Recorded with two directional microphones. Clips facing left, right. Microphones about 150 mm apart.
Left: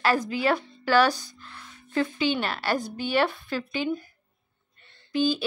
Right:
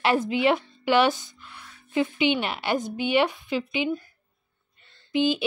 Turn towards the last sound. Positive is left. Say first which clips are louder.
# right 1 dB
turn(degrees=-20)  # may be behind; listen again after turning